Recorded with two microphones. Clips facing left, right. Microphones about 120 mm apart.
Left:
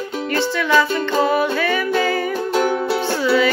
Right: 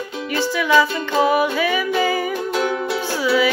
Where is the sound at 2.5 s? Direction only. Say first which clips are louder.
Left 4 dB; 35° left (ahead or behind).